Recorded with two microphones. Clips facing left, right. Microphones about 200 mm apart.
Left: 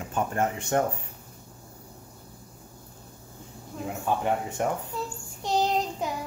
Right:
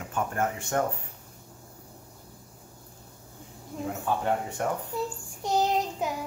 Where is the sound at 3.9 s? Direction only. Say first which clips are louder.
Left 1 dB; 15° left (ahead or behind).